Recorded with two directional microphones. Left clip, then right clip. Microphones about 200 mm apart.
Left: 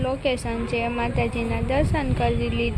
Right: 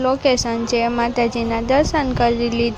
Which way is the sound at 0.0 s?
25° right (ahead or behind).